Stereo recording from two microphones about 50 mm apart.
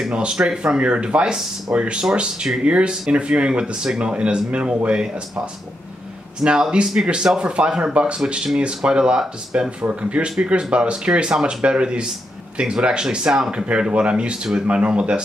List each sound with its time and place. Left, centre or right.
0.1 s speech: right